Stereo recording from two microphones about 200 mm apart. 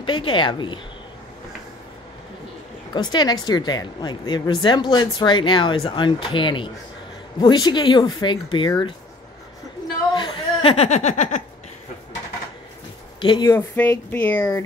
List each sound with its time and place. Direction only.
0.0 s a woman's voice: 25° left (ahead or behind)
2.9 s a woman's voice: 20° left (ahead or behind)
10.1 s speech: 25° left (ahead or behind)
13.2 s a woman's voice: 20° left (ahead or behind)
13.7 s speech: 10° left (ahead or behind)